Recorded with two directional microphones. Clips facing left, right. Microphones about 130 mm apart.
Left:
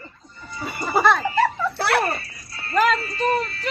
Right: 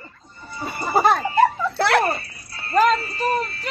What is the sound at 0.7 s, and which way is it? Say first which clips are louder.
Speech: right 1 dB; 40° right (ahead or behind).